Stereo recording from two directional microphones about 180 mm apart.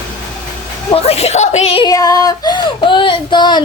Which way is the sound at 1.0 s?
35° left (ahead or behind).